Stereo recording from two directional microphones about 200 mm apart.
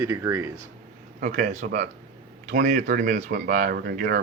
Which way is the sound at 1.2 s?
40° right (ahead or behind).